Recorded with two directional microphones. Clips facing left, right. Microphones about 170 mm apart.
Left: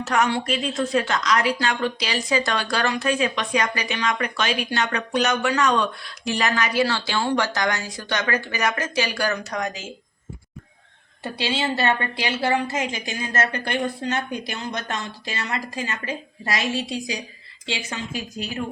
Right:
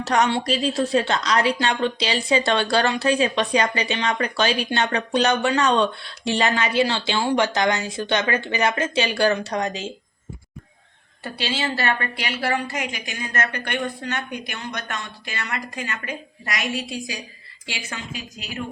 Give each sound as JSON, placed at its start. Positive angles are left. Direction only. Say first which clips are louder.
{"t": 0.0, "sound": "a woman's voice", "louder": "right 2 dB", "side_deg": -35}
{"t": 11.2, "sound": "a woman's voice", "louder": "left 1 dB", "side_deg": 20}